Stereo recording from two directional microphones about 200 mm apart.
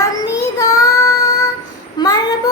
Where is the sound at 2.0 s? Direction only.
20° left (ahead or behind).